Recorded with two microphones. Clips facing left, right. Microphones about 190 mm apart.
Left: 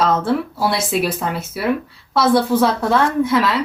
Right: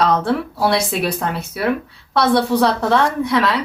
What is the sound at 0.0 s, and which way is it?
A woman's voice, centre (ahead or behind).